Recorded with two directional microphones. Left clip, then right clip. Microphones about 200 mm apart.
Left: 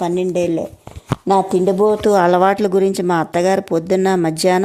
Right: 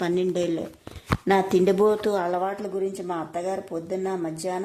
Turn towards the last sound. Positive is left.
turn(degrees=45)  # may be behind; listen again after turning